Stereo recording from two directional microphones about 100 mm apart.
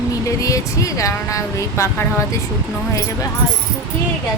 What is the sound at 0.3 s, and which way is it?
Speech, 35° left (ahead or behind).